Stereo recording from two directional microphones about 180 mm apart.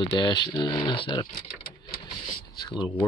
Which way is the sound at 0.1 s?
25° left (ahead or behind).